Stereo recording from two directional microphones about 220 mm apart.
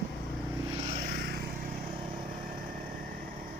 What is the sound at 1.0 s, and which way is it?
Vehicle, 40° right (ahead or behind).